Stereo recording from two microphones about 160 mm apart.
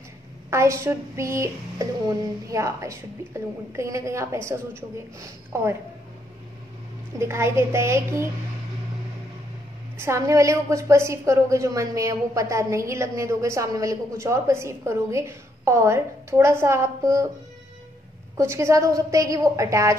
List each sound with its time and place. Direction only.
0.5 s a woman's voice: 15° right (ahead or behind)
7.2 s a woman's voice: 15° right (ahead or behind)
9.9 s a woman's voice: 15° right (ahead or behind)
18.4 s a woman's voice: 15° right (ahead or behind)